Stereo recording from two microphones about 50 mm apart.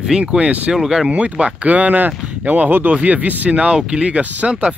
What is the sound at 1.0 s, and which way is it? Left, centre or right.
Speech, right.